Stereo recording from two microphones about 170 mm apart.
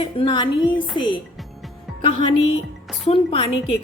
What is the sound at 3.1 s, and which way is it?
Speech, 35° left (ahead or behind).